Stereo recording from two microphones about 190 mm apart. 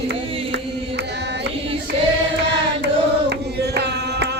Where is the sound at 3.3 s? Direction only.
60° right (ahead or behind).